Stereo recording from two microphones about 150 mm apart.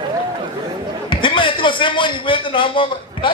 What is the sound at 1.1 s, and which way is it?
Speech, 35° left (ahead or behind).